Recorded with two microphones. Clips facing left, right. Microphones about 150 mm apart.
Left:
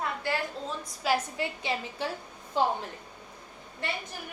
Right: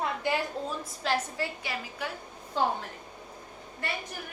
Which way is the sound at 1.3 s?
20° left (ahead or behind).